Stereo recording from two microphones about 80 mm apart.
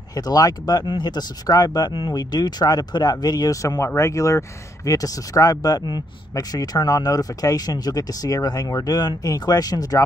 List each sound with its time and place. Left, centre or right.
0.1 s speech: left
0.8 s speech: left
3.6 s speech: left